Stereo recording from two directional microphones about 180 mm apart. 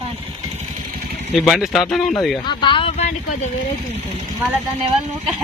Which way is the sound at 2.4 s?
25° left (ahead or behind).